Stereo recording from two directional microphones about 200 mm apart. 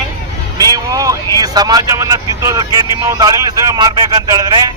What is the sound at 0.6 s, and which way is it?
Speech, 20° right (ahead or behind).